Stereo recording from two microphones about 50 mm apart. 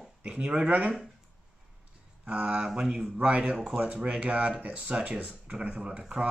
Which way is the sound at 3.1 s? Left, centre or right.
Right.